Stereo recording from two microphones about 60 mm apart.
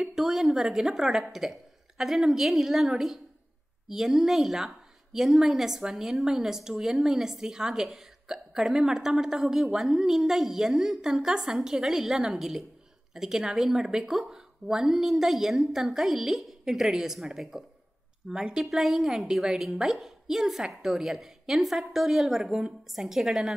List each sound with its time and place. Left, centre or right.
0.0 s a woman's voice: centre